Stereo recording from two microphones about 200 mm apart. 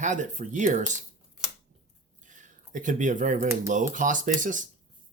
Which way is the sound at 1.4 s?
5° right (ahead or behind).